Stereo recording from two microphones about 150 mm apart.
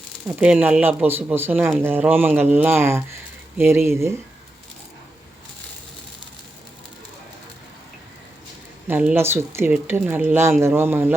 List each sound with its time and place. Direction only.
0.3 s speech: 10° right (ahead or behind)
8.9 s speech: 10° right (ahead or behind)